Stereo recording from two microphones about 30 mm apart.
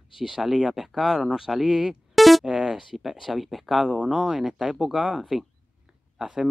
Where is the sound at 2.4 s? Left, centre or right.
Right.